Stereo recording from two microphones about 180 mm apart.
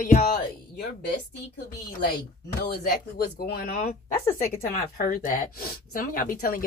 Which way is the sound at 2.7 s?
60° left (ahead or behind).